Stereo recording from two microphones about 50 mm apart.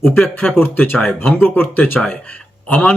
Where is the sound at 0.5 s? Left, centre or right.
Left.